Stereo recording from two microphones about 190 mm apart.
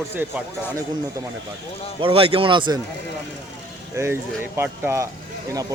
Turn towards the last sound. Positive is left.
turn(degrees=-15)  # may be behind; listen again after turning